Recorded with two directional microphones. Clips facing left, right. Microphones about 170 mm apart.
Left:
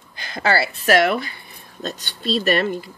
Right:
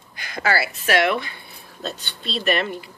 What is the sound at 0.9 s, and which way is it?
A woman's voice, 45° left (ahead or behind).